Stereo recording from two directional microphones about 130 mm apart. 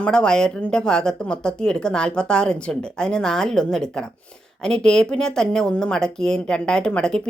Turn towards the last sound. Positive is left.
turn(degrees=5)  # may be behind; listen again after turning